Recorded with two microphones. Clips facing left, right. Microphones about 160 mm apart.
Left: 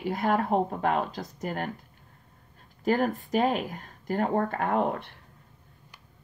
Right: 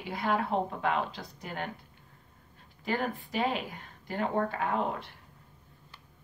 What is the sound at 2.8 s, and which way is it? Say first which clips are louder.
Speech: left 7 dB; 45° left (ahead or behind).